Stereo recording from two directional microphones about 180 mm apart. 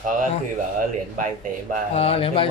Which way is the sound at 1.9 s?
30° left (ahead or behind).